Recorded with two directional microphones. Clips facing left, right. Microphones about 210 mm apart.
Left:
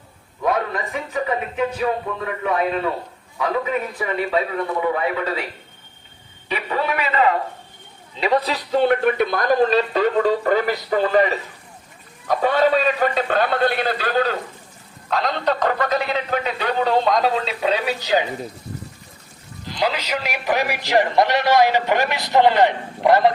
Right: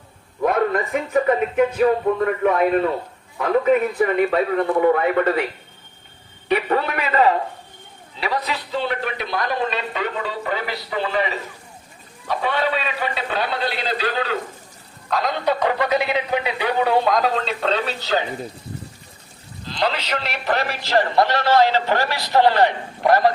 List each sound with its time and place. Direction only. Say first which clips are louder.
0.4 s speech: right 3 dB; 55° right (ahead or behind)
6.5 s a man's voice: right 3 dB; 55° right (ahead or behind)
8.2 s a man's voice: left 5 dB; 25° left (ahead or behind)
8.7 s speech: left 9 dB; 50° left (ahead or behind)
15.1 s speech: even; centre (ahead or behind)
19.6 s a man's voice: even; 10° left (ahead or behind)